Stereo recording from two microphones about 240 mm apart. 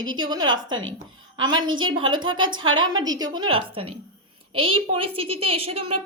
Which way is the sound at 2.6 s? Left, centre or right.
Right.